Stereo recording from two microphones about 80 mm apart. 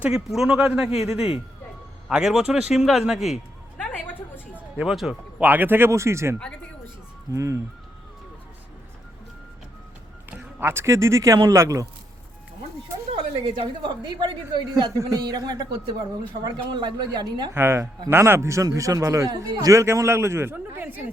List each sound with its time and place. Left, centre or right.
0.0 s a man's voice: centre
4.5 s a sound: centre
5.4 s speech: right
7.3 s a man's voice: right
10.3 s a man's voice: right
13.8 s a woman's voice: right
14.9 s speech: right
17.5 s a man's voice: right